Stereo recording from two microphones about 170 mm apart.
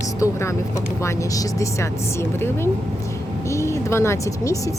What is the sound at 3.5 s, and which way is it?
Speech, 15° left (ahead or behind).